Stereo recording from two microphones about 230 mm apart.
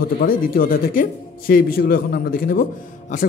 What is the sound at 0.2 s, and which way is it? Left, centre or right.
A man's voice, left.